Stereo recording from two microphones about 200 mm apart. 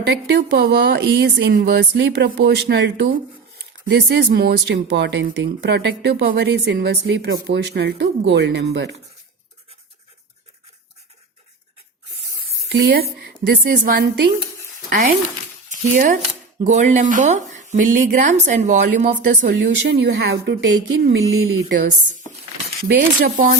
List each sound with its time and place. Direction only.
0.0 s speech: 60° right (ahead or behind)
12.6 s a woman's voice: 60° right (ahead or behind); by 19.5 s 40° right (ahead or behind)
19.6 s speech: 55° right (ahead or behind)
22.9 s a woman's voice: 45° right (ahead or behind)